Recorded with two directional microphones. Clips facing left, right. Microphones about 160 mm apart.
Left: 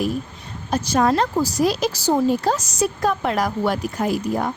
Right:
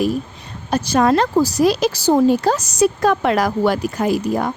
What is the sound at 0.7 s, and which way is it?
A woman's voice, 75° right (ahead or behind).